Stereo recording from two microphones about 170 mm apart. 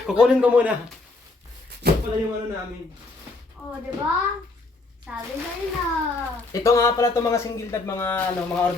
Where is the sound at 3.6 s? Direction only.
Centre (ahead or behind).